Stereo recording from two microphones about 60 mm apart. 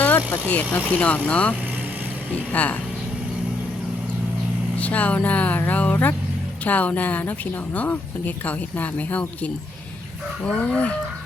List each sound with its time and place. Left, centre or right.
0.4 s speech: left
4.8 s speech: left
8.4 s speech: left